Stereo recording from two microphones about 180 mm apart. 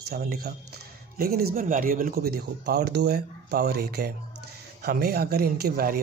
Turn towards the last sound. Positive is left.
turn(degrees=-55)  # may be behind; listen again after turning